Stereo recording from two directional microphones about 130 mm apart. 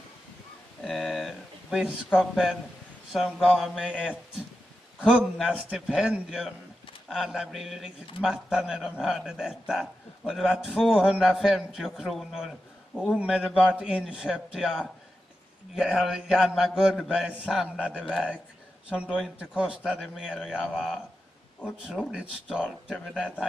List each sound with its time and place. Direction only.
0.8 s a sound: centre (ahead or behind)
3.1 s a man's voice: 5° right (ahead or behind)
5.0 s a man's voice: 5° right (ahead or behind)